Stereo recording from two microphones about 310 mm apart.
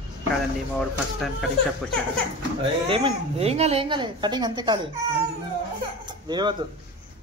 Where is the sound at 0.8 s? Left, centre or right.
Centre.